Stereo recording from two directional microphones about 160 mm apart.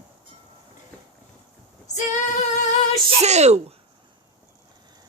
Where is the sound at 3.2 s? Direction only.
45° right (ahead or behind).